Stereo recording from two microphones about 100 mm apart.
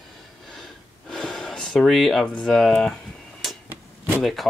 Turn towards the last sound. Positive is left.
turn(degrees=0)  # may be behind; listen again after turning